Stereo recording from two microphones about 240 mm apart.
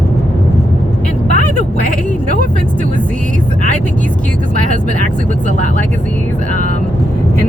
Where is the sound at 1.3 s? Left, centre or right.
Left.